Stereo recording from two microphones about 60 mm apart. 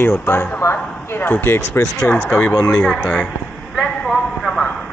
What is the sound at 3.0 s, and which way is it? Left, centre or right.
Speech, left.